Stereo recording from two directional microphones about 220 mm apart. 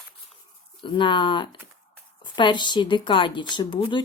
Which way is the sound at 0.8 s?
20° left (ahead or behind).